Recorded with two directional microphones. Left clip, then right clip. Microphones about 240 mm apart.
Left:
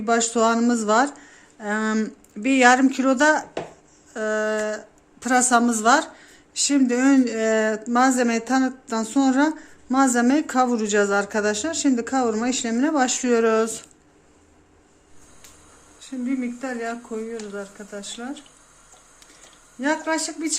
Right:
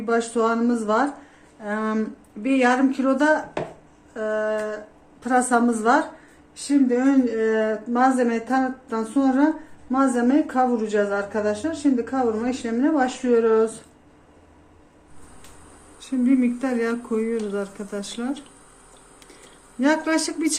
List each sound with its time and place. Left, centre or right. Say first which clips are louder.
0.0 s a woman's voice: left 2 dB; left
16.0 s speech: right 7 dB; centre
19.8 s speech: right 2 dB; centre